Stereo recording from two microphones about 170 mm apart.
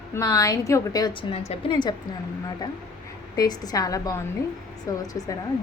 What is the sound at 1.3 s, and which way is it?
Speech, 30° left (ahead or behind).